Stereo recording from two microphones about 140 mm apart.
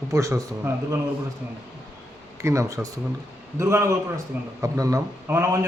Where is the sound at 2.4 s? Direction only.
20° right (ahead or behind).